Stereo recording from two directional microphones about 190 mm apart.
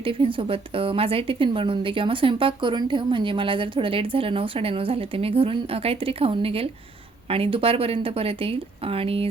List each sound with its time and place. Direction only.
0.0 s a woman's voice: 30° right (ahead or behind)